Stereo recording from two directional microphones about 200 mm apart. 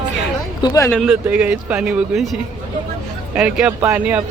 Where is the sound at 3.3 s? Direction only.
5° right (ahead or behind).